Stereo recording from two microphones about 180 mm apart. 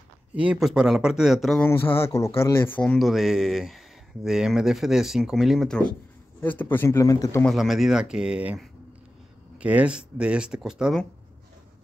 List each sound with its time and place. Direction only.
0.3 s speech: 5° right (ahead or behind)
1.6 s a man's voice: 10° left (ahead or behind)
7.4 s speech: centre (ahead or behind)